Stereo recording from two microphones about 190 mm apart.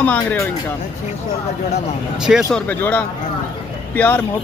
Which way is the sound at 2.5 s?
10° left (ahead or behind).